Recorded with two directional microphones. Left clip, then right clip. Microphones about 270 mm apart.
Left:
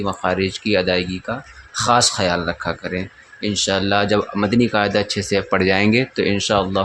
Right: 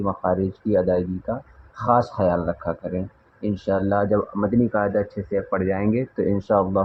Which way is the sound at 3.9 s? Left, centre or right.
Left.